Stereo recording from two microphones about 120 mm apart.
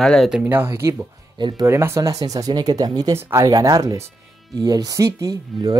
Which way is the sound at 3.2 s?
20° right (ahead or behind).